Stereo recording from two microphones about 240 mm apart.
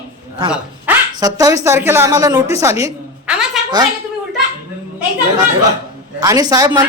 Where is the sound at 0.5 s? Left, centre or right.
Centre.